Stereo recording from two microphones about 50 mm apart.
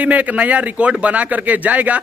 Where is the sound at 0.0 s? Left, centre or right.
Right.